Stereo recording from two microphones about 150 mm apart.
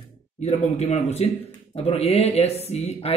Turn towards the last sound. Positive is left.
turn(degrees=45)  # may be behind; listen again after turning